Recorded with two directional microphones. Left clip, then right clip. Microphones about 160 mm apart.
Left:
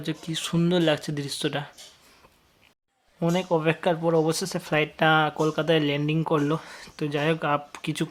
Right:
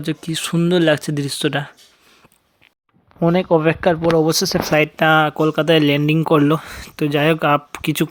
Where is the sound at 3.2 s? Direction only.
25° right (ahead or behind).